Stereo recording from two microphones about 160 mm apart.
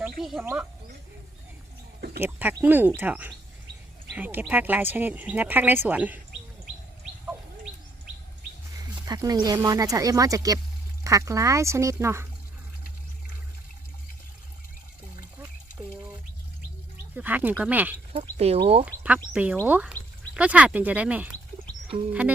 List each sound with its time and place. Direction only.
0.2 s speech: centre (ahead or behind)
2.2 s speech: 10° right (ahead or behind)
7.0 s bird: 5° right (ahead or behind)
9.0 s speech: 25° right (ahead or behind)
17.2 s speech: 10° right (ahead or behind)
18.1 s speech: 40° right (ahead or behind)
19.0 s speech: 10° right (ahead or behind)